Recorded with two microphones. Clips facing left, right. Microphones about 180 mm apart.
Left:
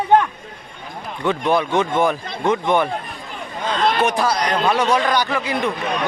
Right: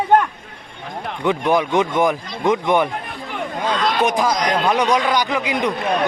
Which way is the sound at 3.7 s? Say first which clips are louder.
Left 4 dB; 55° left (ahead or behind).